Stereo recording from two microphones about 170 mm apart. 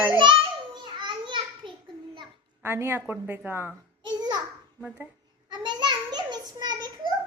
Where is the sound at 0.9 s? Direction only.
25° right (ahead or behind).